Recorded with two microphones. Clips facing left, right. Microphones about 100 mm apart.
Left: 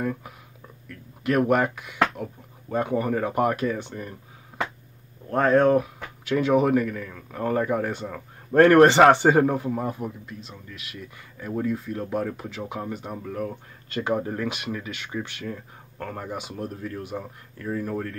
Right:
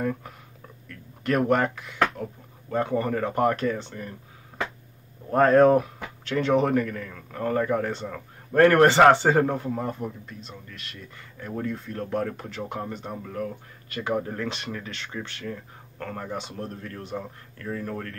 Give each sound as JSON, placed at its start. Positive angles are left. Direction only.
{"t": 0.0, "sound": "speech", "side_deg": 5}
{"t": 5.3, "sound": "speech", "side_deg": 0}
{"t": 6.2, "sound": "speech", "side_deg": 10}
{"t": 7.3, "sound": "speech", "side_deg": 15}
{"t": 13.8, "sound": "speech", "side_deg": 25}